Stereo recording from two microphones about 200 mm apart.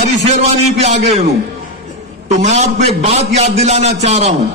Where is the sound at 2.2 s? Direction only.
35° right (ahead or behind).